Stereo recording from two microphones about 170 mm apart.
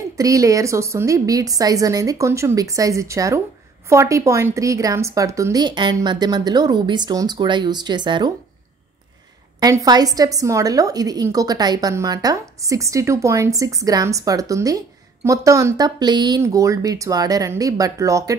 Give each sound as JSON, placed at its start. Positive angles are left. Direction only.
{"t": 0.2, "sound": "a woman's voice", "side_deg": -20}
{"t": 9.6, "sound": "a woman's voice", "side_deg": -25}